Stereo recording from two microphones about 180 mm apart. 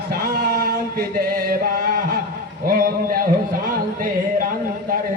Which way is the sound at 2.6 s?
50° right (ahead or behind).